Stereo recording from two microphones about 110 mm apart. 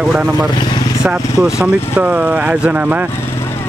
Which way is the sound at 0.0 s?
5° right (ahead or behind).